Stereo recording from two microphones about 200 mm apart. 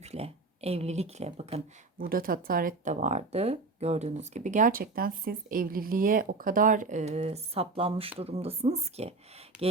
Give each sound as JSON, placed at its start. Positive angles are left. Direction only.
{"t": 0.0, "sound": "speech", "side_deg": -30}
{"t": 2.0, "sound": "speech", "side_deg": -45}
{"t": 9.5, "sound": "speech", "side_deg": -5}